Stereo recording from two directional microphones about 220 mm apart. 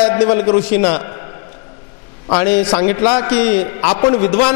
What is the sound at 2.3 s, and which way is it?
A man's voice, 25° left (ahead or behind).